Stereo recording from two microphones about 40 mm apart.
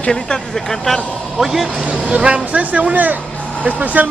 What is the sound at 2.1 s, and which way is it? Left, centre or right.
Speech, right.